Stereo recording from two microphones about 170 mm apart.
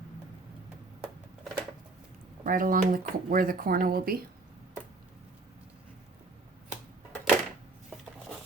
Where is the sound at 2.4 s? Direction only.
55° right (ahead or behind).